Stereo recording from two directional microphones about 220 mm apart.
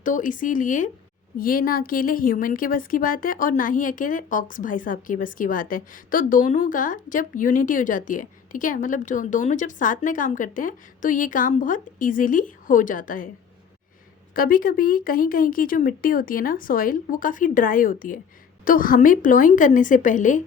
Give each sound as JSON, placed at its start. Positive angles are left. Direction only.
{"t": 0.0, "sound": "a woman's voice", "side_deg": 35}
{"t": 14.3, "sound": "a woman's voice", "side_deg": 40}